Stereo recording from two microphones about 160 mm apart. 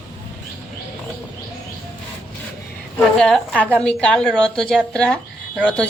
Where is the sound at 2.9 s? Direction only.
Centre (ahead or behind).